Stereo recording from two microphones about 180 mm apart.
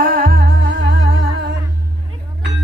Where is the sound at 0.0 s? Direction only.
55° right (ahead or behind).